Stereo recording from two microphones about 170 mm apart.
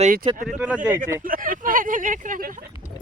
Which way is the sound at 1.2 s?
55° right (ahead or behind).